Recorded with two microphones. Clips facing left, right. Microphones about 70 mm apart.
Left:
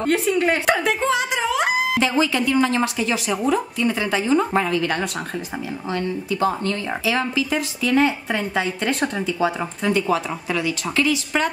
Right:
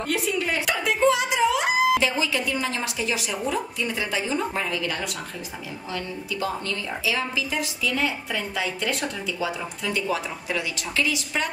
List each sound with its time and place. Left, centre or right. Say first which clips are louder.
0.0 s speech: left 7 dB; left
5.9 s a woman's voice: left 7 dB; left